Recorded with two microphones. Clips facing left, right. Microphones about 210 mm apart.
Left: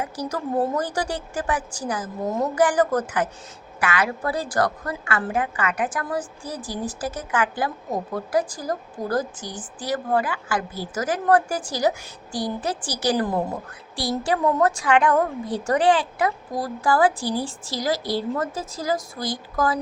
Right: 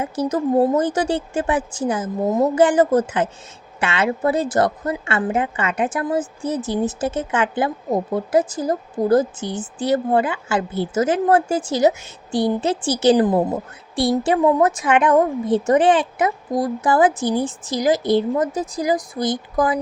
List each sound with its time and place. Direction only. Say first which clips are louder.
0.0 s a woman's voice: right 7 dB; 20° right (ahead or behind)